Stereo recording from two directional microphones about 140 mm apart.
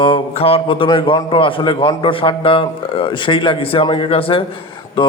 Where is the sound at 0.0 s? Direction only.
40° left (ahead or behind).